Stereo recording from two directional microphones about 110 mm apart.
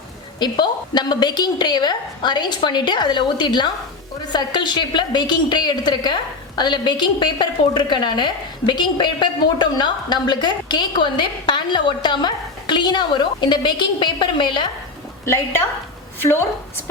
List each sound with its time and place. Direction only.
0.3 s a woman's voice: 40° left (ahead or behind)
15.2 s a woman's voice: 25° left (ahead or behind)